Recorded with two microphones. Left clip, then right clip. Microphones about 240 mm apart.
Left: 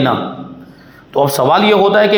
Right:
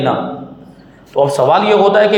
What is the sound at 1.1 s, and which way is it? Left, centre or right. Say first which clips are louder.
A man's voice: right 1 dB; left.